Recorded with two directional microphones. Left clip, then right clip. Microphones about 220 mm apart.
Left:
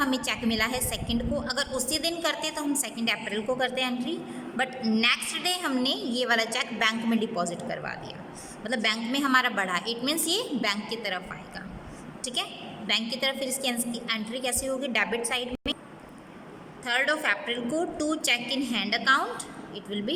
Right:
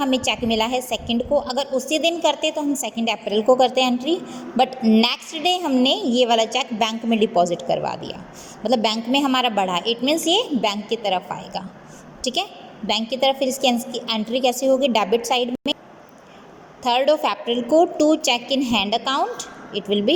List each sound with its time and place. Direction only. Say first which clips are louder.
0.0 s a woman's voice: right 7 dB; 15° right (ahead or behind)
16.8 s a woman's voice: right 8 dB; 15° right (ahead or behind)